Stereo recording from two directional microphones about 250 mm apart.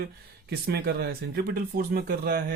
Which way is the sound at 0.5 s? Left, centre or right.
Right.